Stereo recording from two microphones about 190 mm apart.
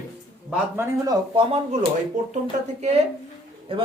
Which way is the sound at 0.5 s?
15° right (ahead or behind).